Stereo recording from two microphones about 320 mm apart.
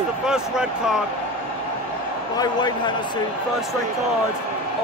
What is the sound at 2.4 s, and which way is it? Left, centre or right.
Speech, centre.